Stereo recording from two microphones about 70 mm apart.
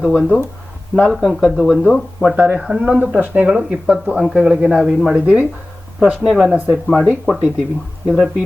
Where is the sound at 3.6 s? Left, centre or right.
Centre.